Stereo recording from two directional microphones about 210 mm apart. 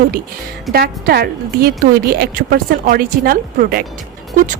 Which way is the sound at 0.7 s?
45° right (ahead or behind).